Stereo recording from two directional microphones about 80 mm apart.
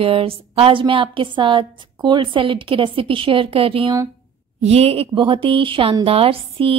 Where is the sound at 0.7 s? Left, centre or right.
Right.